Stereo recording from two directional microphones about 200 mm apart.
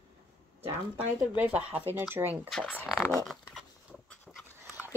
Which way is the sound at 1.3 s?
10° right (ahead or behind).